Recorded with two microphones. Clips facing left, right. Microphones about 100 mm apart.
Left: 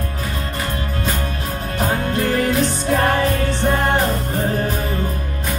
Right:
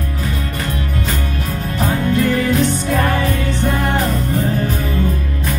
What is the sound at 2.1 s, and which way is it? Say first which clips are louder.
Music: right 2 dB; 40° left (ahead or behind).